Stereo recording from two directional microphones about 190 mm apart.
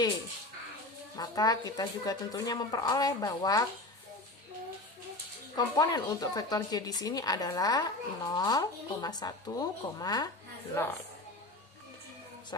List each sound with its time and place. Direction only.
1.1 s speech: 20° left (ahead or behind)
5.5 s speech: 20° left (ahead or behind)